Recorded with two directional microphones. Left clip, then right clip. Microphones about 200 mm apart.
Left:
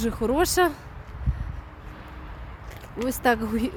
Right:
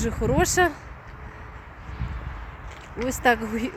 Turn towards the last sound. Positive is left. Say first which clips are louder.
# right 1 dB
turn(degrees=15)  # may be behind; listen again after turning